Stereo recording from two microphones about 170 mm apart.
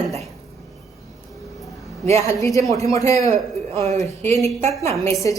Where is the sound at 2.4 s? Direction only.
20° left (ahead or behind).